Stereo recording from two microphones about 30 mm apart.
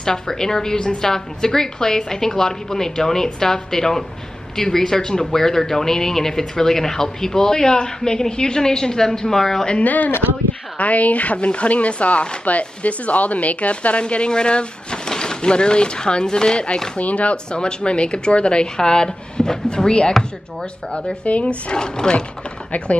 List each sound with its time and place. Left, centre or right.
0.0 s speech: centre
9.8 s speech: left
11.3 s speech: left
17.0 s speech: left
17.5 s speech: left
21.3 s speech: left
21.7 s speech: left